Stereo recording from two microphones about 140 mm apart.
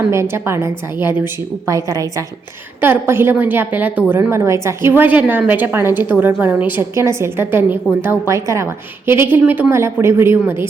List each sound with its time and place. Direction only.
0.1 s a woman's voice: 20° right (ahead or behind)